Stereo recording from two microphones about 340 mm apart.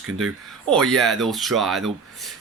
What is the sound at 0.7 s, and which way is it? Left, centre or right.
Speech, centre.